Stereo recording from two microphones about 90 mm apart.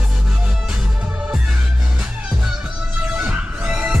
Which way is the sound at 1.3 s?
5° right (ahead or behind).